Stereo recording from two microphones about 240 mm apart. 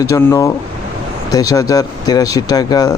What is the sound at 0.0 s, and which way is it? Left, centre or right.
Speech, centre.